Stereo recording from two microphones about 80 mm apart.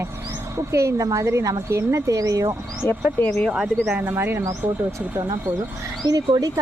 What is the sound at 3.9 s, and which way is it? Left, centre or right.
Speech, right.